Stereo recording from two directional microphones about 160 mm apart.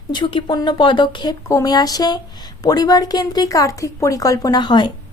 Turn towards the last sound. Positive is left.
turn(degrees=30)  # may be behind; listen again after turning